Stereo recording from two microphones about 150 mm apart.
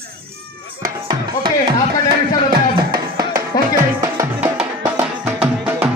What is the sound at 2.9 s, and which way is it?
Music, 80° right.